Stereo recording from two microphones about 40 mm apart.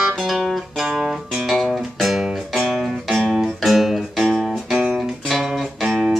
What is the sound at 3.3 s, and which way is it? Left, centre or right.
Music, centre.